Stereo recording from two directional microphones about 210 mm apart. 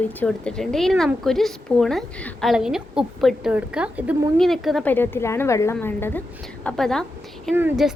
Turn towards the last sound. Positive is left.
turn(degrees=-5)  # may be behind; listen again after turning